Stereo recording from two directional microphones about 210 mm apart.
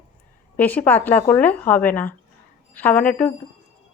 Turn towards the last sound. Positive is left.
turn(degrees=5)  # may be behind; listen again after turning